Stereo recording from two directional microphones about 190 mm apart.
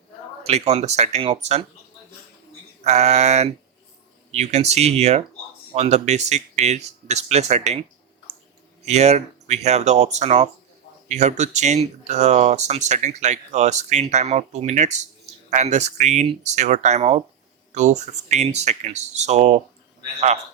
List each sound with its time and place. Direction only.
0.4 s speech: 35° right (ahead or behind)
2.8 s speech: 35° right (ahead or behind)
8.9 s speech: 35° right (ahead or behind)